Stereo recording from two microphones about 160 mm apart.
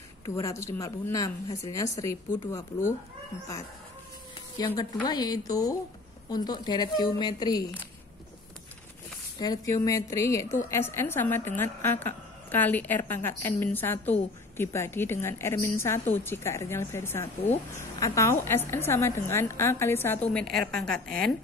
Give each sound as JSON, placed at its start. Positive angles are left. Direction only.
{"t": 0.2, "sound": "speech", "side_deg": 20}
{"t": 4.6, "sound": "speech", "side_deg": 20}
{"t": 9.4, "sound": "a woman's voice", "side_deg": 20}
{"t": 20.3, "sound": "a woman's voice", "side_deg": 5}